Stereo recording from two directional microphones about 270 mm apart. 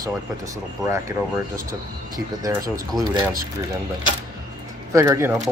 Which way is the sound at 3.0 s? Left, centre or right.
Centre.